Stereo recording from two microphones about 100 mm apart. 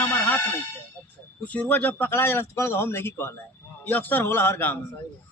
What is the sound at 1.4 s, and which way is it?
A man's voice, 15° left (ahead or behind).